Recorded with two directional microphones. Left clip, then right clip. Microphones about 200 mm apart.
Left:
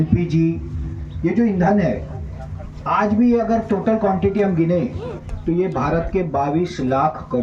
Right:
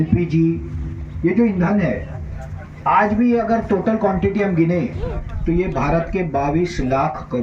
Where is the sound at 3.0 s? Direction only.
25° right (ahead or behind).